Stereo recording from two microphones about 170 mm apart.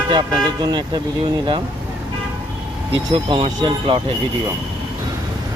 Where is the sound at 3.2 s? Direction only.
30° right (ahead or behind).